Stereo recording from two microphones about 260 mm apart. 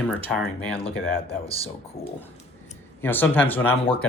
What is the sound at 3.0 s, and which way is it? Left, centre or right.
Speech, centre.